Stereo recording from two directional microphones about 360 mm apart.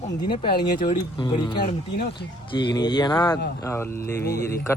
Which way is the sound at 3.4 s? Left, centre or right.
Left.